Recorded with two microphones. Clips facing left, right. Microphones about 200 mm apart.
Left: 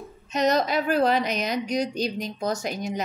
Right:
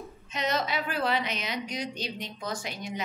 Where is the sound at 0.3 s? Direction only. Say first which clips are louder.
Left 8 dB; 40° left (ahead or behind).